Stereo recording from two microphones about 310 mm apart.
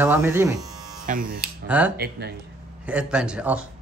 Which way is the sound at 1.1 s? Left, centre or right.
Right.